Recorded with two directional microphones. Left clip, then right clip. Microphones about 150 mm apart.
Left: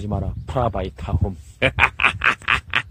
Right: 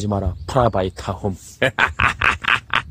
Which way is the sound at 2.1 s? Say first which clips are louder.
Right 2 dB; 80° right.